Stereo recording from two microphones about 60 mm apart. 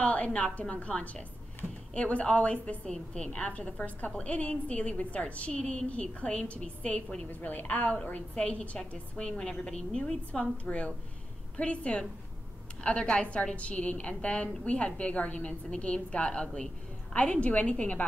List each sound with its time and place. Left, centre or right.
0.0 s a woman's voice: left
1.6 s a sound: right
2.0 s a woman's voice: left
7.2 s a woman's voice: left